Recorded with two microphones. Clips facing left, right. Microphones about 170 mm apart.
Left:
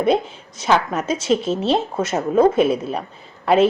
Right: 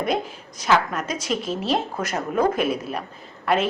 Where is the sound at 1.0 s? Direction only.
30° left (ahead or behind).